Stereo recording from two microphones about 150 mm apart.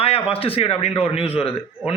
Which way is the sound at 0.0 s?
40° left (ahead or behind).